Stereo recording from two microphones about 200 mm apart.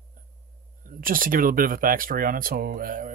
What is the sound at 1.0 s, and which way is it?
Speech, 45° right (ahead or behind).